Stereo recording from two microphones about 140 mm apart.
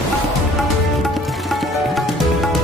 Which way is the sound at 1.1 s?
Centre (ahead or behind).